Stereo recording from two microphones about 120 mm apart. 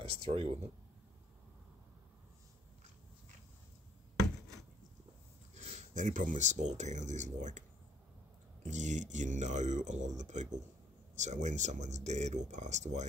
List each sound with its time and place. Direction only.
0.2 s speech: 55° right (ahead or behind)
5.5 s speech: 70° right (ahead or behind); by 7.6 s 90° right
8.6 s speech: 85° right